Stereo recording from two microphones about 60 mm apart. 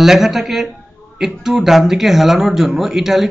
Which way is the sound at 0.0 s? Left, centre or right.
Centre.